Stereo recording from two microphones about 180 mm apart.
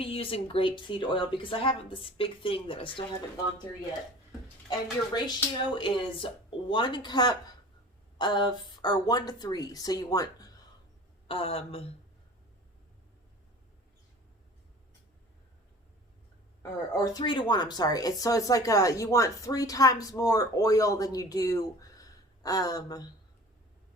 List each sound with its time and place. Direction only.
0.0 s speech: 30° left (ahead or behind)
4.7 s speech: 25° left (ahead or behind)
11.3 s speech: 30° left (ahead or behind)
16.9 s speech: 20° left (ahead or behind)